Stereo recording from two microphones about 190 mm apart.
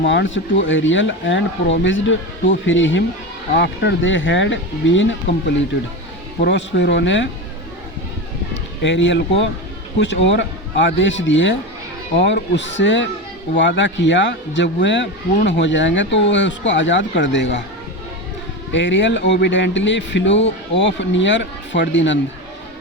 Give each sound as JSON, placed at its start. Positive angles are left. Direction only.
{"t": 0.0, "sound": "speech", "side_deg": 70}
{"t": 8.8, "sound": "speech", "side_deg": 75}
{"t": 18.7, "sound": "speech", "side_deg": 75}